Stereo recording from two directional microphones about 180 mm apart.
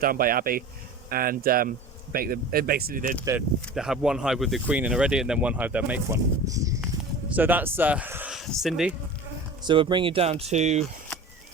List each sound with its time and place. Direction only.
0.0 s speech: 55° right (ahead or behind)
3.8 s speech: 5° right (ahead or behind)
6.5 s a sound: 20° right (ahead or behind)
6.8 s speech: 10° right (ahead or behind)
9.6 s speech: 25° right (ahead or behind)